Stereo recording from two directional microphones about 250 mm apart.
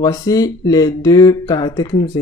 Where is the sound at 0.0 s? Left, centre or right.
Centre.